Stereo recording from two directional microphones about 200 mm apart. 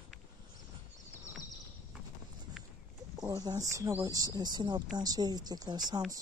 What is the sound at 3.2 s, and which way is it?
Speech, 20° right (ahead or behind).